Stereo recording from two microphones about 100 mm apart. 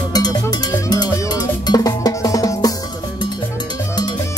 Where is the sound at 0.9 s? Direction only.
45° left (ahead or behind).